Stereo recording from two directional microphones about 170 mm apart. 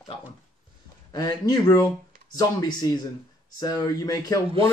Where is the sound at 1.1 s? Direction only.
25° left (ahead or behind).